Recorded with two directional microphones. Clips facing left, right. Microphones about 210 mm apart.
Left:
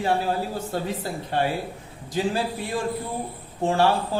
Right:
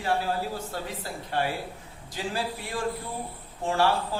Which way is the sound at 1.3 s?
25° left (ahead or behind).